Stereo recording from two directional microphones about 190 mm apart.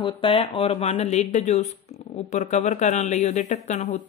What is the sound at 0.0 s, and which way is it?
Speech, 30° left (ahead or behind).